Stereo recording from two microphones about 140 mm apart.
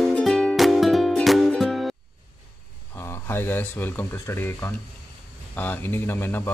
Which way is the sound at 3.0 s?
15° left (ahead or behind).